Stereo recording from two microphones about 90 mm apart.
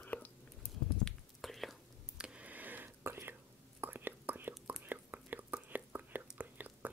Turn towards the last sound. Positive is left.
turn(degrees=-20)  # may be behind; listen again after turning